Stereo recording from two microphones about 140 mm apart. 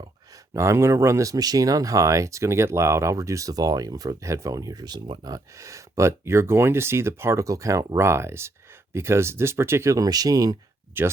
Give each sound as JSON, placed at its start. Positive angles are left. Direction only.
{"t": 0.5, "sound": "speech", "side_deg": -20}
{"t": 11.0, "sound": "speech", "side_deg": -15}